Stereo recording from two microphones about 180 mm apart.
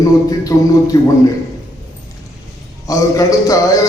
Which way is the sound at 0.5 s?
15° left (ahead or behind).